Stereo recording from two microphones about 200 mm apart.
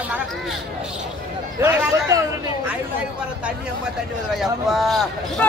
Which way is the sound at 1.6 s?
15° right (ahead or behind).